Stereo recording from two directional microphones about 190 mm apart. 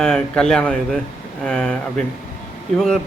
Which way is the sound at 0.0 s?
5° left (ahead or behind).